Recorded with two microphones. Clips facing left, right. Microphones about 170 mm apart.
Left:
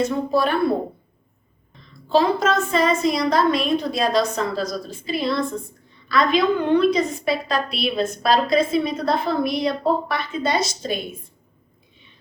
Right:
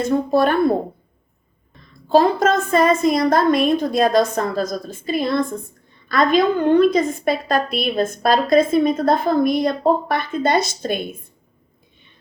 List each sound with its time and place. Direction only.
0.0 s a woman's voice: 50° right (ahead or behind)
2.0 s a woman's voice: 50° right (ahead or behind)